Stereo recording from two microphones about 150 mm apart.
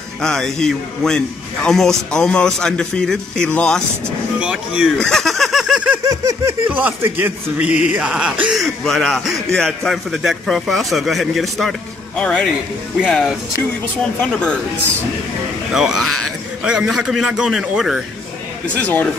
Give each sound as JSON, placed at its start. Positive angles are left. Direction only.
{"t": 0.2, "sound": "a man's voice", "side_deg": 5}
{"t": 4.4, "sound": "speech", "side_deg": -5}
{"t": 4.9, "sound": "a sound", "side_deg": 5}
{"t": 6.0, "sound": "a sound", "side_deg": -20}
{"t": 6.7, "sound": "a man's voice", "side_deg": -10}
{"t": 13.0, "sound": "a man's voice", "side_deg": -5}
{"t": 15.7, "sound": "a man's voice", "side_deg": -5}
{"t": 18.8, "sound": "a man's voice", "side_deg": 10}